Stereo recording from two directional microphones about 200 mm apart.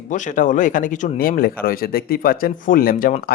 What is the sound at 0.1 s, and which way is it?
Speech, 40° left (ahead or behind).